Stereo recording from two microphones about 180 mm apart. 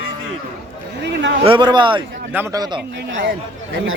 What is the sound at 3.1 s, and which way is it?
Speech, 90° right.